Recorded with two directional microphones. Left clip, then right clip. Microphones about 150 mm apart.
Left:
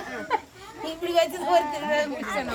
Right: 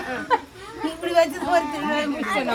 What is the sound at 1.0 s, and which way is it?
Speech, 40° left (ahead or behind).